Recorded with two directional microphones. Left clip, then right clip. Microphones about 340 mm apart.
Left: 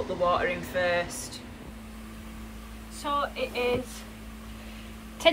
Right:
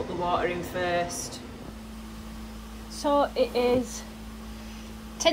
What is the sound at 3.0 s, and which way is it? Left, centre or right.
Speech, centre.